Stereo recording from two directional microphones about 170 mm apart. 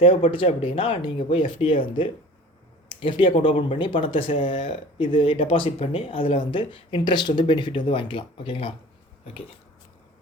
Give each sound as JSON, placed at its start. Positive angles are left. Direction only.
{"t": 0.0, "sound": "speech", "side_deg": 35}